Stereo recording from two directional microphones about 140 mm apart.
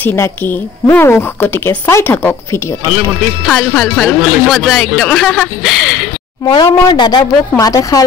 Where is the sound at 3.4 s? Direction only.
5° left (ahead or behind).